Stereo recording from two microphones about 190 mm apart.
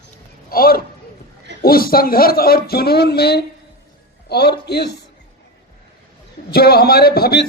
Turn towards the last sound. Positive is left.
turn(degrees=55)  # may be behind; listen again after turning